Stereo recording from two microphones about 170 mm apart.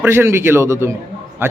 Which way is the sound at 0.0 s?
15° right (ahead or behind).